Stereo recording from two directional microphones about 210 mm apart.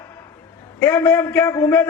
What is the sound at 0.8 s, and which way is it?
A man's voice, 10° left (ahead or behind).